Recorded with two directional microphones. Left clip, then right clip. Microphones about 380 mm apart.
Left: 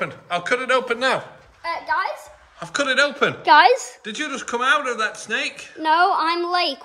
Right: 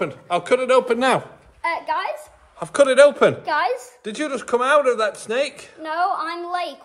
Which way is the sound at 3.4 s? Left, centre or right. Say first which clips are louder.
Left 8 dB; left.